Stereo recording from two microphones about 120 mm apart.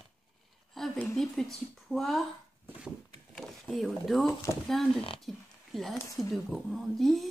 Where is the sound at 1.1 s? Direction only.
5° left (ahead or behind).